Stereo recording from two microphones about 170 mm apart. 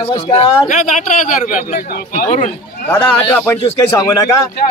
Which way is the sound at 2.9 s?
10° left (ahead or behind).